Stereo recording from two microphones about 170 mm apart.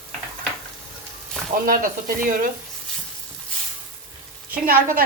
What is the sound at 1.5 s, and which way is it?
Speech, 55° right (ahead or behind).